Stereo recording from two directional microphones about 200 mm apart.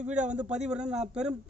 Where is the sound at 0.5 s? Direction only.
5° right (ahead or behind).